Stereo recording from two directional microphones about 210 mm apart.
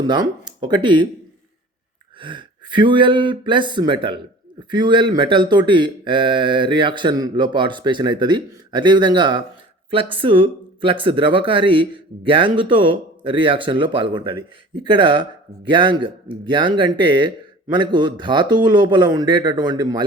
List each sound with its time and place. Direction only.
0.0 s speech: 20° right (ahead or behind)
2.1 s a man's voice: 25° right (ahead or behind)